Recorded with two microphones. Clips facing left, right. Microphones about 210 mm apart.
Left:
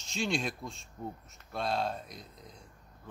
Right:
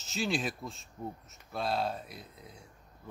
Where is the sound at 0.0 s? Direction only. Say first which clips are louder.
Even; centre (ahead or behind).